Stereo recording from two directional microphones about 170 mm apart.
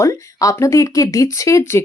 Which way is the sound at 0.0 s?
20° left (ahead or behind).